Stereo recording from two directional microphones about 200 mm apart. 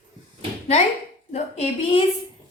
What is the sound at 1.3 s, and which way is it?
Speech, 30° left (ahead or behind).